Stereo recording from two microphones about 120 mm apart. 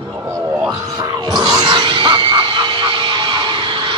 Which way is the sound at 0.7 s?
35° right (ahead or behind).